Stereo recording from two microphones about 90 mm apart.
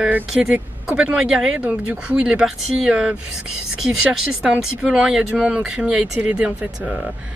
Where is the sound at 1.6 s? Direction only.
15° right (ahead or behind).